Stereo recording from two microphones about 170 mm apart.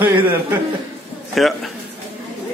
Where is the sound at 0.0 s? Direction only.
10° right (ahead or behind).